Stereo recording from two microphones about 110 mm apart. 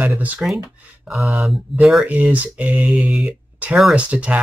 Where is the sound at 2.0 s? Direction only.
15° right (ahead or behind).